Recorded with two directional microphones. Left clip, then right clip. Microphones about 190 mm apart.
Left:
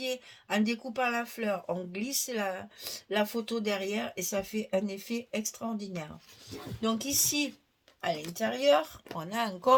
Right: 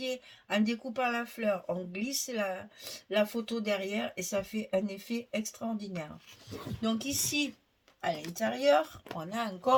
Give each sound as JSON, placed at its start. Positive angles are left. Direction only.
{"t": 0.0, "sound": "speech", "side_deg": 40}
{"t": 6.8, "sound": "speech", "side_deg": 40}